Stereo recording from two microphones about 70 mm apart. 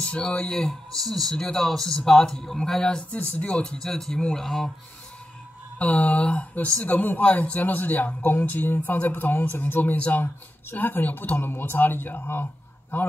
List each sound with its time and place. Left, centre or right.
0.0 s speech: centre
5.8 s speech: centre